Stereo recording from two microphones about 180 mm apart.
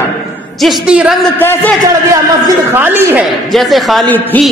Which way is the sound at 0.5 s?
Centre (ahead or behind).